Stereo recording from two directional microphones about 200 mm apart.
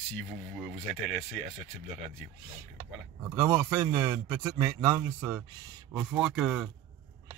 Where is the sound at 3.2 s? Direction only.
10° right (ahead or behind).